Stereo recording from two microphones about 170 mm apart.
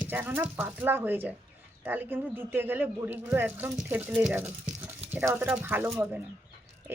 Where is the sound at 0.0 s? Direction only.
10° right (ahead or behind).